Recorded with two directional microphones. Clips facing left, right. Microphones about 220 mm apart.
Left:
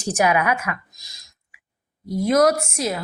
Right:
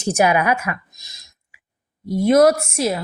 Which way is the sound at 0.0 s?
25° right (ahead or behind).